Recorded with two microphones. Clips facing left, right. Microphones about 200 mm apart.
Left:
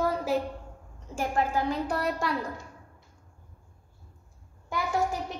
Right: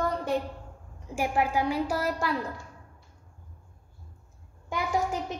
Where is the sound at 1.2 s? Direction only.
10° right (ahead or behind).